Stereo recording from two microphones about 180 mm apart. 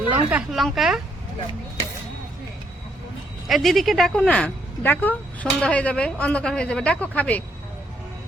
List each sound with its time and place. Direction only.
0.3 s speech: 5° right (ahead or behind)
3.4 s a woman's voice: centre (ahead or behind)